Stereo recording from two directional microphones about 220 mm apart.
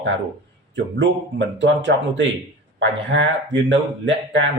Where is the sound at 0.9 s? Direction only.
55° right (ahead or behind).